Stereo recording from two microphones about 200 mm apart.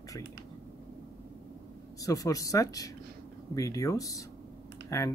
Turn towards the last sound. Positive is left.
turn(degrees=15)  # may be behind; listen again after turning